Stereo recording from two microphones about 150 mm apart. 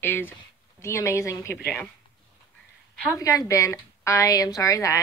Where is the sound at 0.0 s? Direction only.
15° left (ahead or behind).